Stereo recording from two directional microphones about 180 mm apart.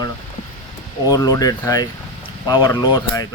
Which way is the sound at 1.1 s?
20° left (ahead or behind).